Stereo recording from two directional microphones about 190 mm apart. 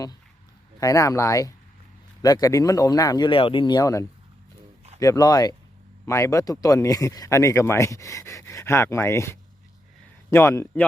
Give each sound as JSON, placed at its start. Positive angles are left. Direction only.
{"t": 0.8, "sound": "speech", "side_deg": 15}